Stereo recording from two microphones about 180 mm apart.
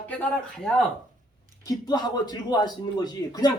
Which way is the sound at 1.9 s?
25° left (ahead or behind).